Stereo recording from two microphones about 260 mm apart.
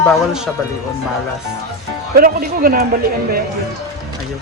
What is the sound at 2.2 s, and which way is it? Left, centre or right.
Speech, right.